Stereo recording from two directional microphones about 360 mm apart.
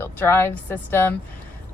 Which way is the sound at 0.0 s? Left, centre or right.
Centre.